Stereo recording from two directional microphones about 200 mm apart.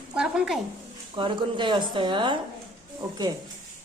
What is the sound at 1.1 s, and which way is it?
A woman's voice, 25° right (ahead or behind).